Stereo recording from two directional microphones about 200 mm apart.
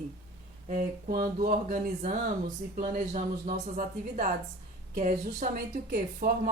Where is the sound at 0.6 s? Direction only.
45° right (ahead or behind).